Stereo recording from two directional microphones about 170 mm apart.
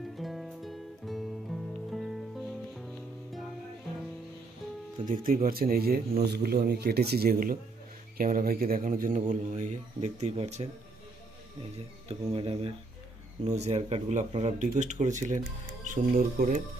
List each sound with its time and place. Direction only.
0.2 s music: centre (ahead or behind)
5.1 s a man's voice: 55° right (ahead or behind); by 10.7 s 40° right (ahead or behind)
12.1 s speech: 35° right (ahead or behind); by 16.6 s 55° right (ahead or behind)